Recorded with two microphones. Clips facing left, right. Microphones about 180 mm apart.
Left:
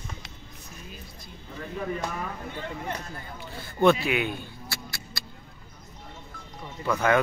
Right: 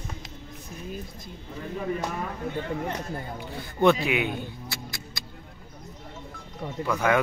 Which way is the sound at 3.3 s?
15° right (ahead or behind).